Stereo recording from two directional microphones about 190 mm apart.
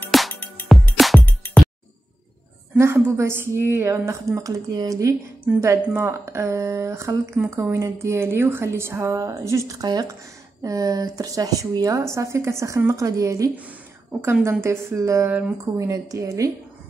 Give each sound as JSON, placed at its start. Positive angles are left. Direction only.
{"t": 0.1, "sound": "music", "side_deg": 5}
{"t": 2.8, "sound": "speech", "side_deg": -15}